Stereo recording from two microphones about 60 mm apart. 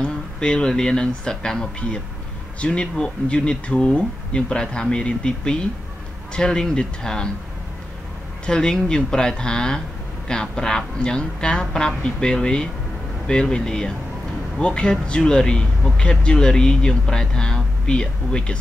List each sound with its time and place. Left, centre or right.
0.0 s speech: centre
8.5 s speech: centre